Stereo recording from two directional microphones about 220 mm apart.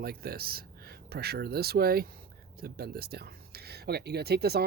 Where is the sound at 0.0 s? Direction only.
45° right (ahead or behind).